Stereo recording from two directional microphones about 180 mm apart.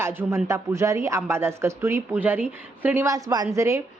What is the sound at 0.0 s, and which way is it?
Speech, 15° right (ahead or behind).